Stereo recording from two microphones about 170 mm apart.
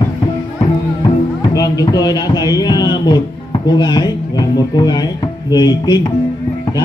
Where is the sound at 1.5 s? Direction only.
20° left (ahead or behind).